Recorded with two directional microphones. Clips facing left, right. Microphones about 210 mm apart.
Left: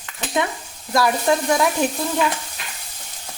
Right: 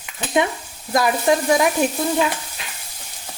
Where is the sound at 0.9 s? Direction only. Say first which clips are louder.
Right 1 dB; 20° right (ahead or behind).